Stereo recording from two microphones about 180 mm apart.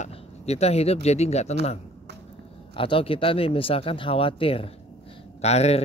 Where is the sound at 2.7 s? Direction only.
30° left (ahead or behind).